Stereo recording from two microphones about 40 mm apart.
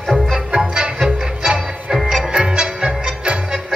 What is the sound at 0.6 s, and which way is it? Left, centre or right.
Music, centre.